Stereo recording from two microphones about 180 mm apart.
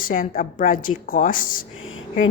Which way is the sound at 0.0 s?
50° left (ahead or behind).